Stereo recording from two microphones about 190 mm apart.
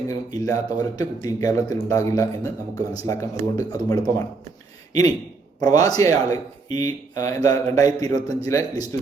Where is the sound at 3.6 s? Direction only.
20° left (ahead or behind).